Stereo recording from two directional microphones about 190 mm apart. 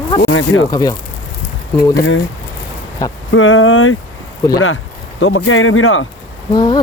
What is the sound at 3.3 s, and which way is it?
Speech, 90° left.